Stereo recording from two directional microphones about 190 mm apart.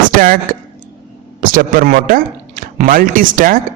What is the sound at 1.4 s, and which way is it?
Speech, 45° right (ahead or behind).